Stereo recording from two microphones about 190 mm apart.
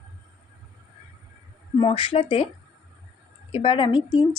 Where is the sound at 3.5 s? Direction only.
30° left (ahead or behind).